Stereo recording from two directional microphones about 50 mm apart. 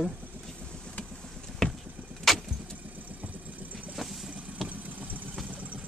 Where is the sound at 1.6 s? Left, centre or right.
Centre.